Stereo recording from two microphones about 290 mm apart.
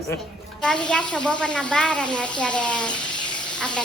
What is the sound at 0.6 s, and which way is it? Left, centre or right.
Speech, centre.